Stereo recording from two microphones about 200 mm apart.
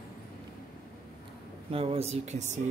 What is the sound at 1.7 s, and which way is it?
Speech, 30° right (ahead or behind).